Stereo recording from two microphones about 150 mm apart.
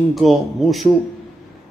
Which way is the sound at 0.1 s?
Centre (ahead or behind).